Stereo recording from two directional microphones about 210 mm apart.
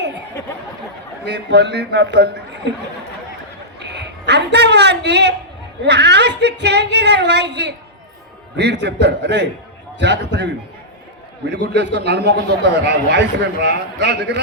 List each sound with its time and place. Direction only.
1.2 s a man's voice: 55° right (ahead or behind)
3.8 s a woman's voice: 55° right (ahead or behind)
11.5 s a man's voice: 55° right (ahead or behind)